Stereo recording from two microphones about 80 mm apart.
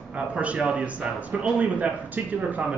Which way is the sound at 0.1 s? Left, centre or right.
Centre.